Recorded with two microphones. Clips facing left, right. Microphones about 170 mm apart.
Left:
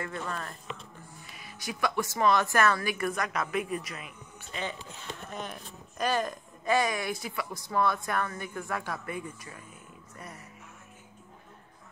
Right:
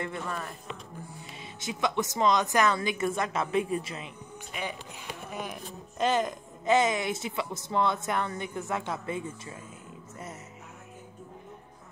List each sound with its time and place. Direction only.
0.0 s a woman's voice: 15° right (ahead or behind)
4.5 s speech: 10° right (ahead or behind)
5.9 s a woman's voice: 20° right (ahead or behind)